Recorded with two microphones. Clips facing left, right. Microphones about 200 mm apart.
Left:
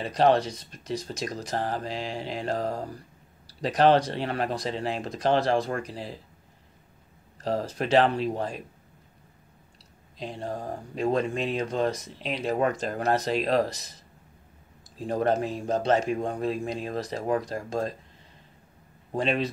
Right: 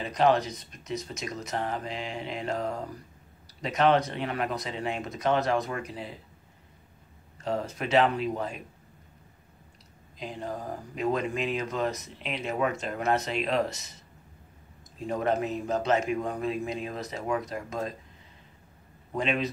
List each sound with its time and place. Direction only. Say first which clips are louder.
0.0 s speech: left 2 dB; 30° left (ahead or behind)
7.4 s speech: left 3 dB; 35° left (ahead or behind)
10.1 s speech: left 2 dB; 30° left (ahead or behind)
15.0 s speech: left 2 dB; 35° left (ahead or behind)
19.1 s speech: left 2 dB; 35° left (ahead or behind)